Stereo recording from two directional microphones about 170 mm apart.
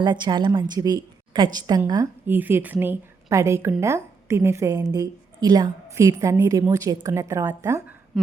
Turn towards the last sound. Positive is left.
turn(degrees=-15)  # may be behind; listen again after turning